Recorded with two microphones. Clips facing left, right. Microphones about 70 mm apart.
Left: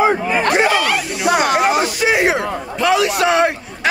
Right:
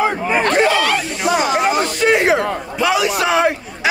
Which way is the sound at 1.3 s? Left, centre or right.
Left.